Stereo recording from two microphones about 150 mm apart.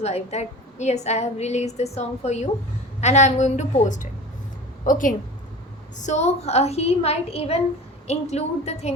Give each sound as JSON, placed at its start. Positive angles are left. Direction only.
{"t": 0.0, "sound": "a woman's voice", "side_deg": 45}
{"t": 6.0, "sound": "a woman's voice", "side_deg": 50}